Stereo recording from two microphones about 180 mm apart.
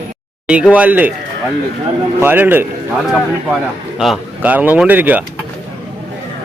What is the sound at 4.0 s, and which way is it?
Speech, 5° right (ahead or behind).